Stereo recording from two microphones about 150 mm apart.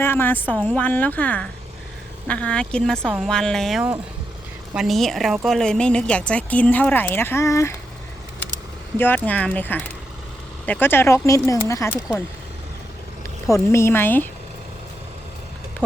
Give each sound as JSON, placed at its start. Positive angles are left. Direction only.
{"t": 0.0, "sound": "a woman's voice", "side_deg": 15}
{"t": 9.0, "sound": "speech", "side_deg": 10}
{"t": 13.5, "sound": "speech", "side_deg": 20}